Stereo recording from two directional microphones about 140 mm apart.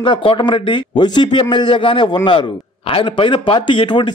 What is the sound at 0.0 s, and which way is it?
A man's voice, 35° left (ahead or behind).